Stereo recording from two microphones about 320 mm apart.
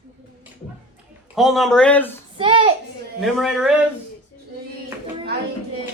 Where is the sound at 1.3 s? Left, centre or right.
Centre.